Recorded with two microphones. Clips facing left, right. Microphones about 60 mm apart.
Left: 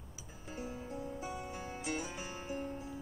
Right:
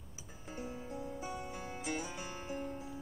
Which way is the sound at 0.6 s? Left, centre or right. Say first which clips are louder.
Left 1 dB; centre.